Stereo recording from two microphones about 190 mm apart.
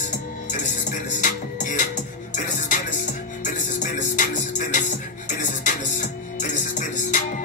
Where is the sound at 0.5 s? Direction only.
40° left (ahead or behind).